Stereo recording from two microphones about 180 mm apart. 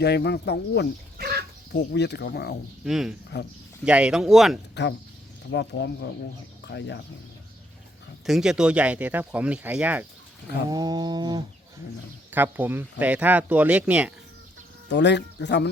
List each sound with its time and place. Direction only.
0.0 s speech: 70° left (ahead or behind)
1.2 s dog: 60° right (ahead or behind)
1.7 s speech: 70° left (ahead or behind)
2.8 s speech: 5° right (ahead or behind)
4.7 s speech: 75° left (ahead or behind)
8.3 s speech: 5° right (ahead or behind)
10.7 s a sound: 20° right (ahead or behind)
12.3 s speech: 10° right (ahead or behind)
14.8 s speech: 75° left (ahead or behind)